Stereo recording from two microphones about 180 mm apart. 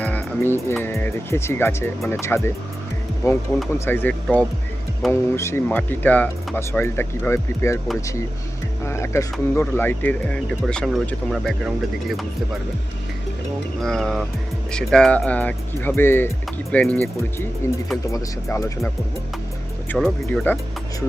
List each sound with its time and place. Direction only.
0.0 s speech: 10° left (ahead or behind)
5.4 s speech: 15° left (ahead or behind)
8.9 s speech: 15° left (ahead or behind)
13.8 s speech: 5° left (ahead or behind)
17.6 s speech: 15° left (ahead or behind)
19.9 s speech: centre (ahead or behind)